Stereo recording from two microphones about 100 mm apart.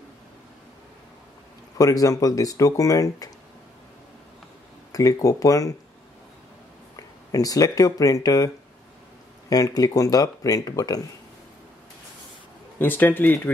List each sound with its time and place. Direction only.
1.8 s speech: 35° left (ahead or behind)
4.9 s speech: 35° left (ahead or behind)
7.0 s speech: 35° left (ahead or behind)
9.5 s speech: 40° left (ahead or behind)
12.7 s speech: 20° left (ahead or behind)